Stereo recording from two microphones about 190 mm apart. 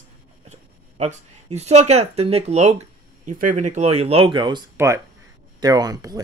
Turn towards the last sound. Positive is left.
turn(degrees=-20)  # may be behind; listen again after turning